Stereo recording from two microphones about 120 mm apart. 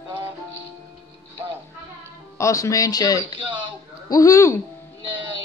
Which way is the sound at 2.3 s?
25° left (ahead or behind).